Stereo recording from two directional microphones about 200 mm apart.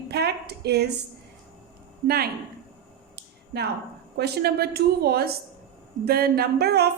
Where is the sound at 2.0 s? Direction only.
50° right (ahead or behind).